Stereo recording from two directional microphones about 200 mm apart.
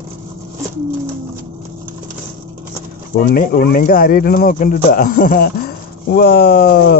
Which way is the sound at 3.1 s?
45° left (ahead or behind).